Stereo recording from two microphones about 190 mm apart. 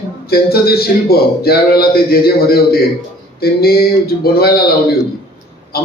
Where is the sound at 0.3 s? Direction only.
55° left (ahead or behind).